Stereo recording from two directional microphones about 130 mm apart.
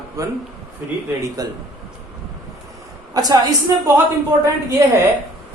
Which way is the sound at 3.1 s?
30° right (ahead or behind).